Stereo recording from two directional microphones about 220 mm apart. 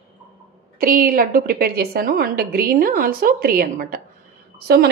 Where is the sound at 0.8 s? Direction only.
40° right (ahead or behind).